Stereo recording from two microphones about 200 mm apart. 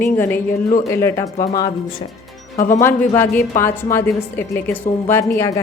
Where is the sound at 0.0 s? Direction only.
10° left (ahead or behind).